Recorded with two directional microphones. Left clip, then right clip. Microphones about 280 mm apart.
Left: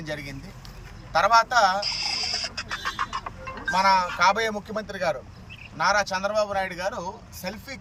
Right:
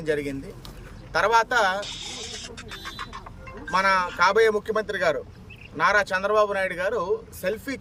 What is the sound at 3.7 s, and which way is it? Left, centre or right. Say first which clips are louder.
Speech: left 1 dB; right.